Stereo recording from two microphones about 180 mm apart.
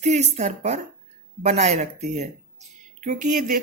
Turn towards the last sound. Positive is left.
turn(degrees=-45)  # may be behind; listen again after turning